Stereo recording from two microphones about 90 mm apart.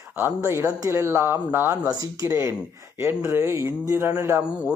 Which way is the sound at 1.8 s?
40° right (ahead or behind).